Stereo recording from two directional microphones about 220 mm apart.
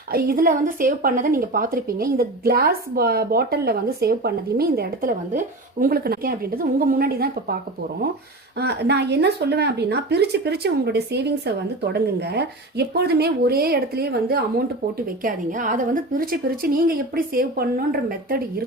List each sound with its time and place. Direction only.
0.1 s speech: 40° right (ahead or behind)
8.5 s a woman's voice: 50° right (ahead or behind)